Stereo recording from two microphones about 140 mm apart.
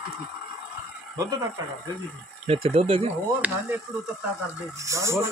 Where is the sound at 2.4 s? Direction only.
45° right (ahead or behind).